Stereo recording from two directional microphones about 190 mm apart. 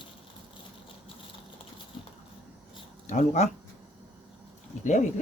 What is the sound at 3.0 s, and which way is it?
Speech, 40° left (ahead or behind).